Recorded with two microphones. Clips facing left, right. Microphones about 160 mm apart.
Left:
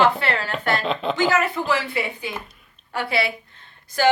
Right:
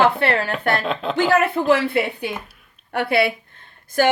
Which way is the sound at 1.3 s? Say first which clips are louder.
Right 5 dB; 60° right (ahead or behind).